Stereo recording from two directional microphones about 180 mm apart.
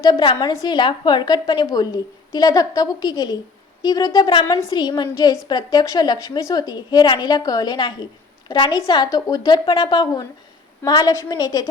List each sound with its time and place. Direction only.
0.0 s a woman's voice: 25° left (ahead or behind)